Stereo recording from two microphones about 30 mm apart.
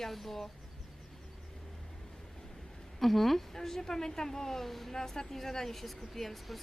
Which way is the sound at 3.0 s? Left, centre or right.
Centre.